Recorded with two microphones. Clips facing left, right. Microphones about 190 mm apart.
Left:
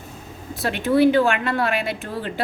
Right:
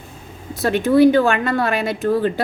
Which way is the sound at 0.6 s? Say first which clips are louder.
Right 4 dB; 40° right (ahead or behind).